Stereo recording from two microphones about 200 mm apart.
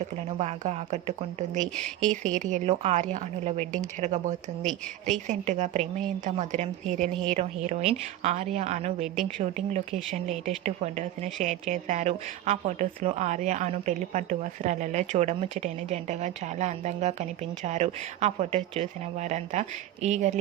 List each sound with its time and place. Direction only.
0.3 s a woman's voice: 35° right (ahead or behind)
1.7 s speech: 5° left (ahead or behind)
2.2 s a woman's voice: 40° right (ahead or behind)